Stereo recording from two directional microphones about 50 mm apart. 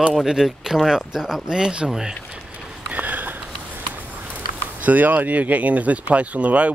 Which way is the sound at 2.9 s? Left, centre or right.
Right.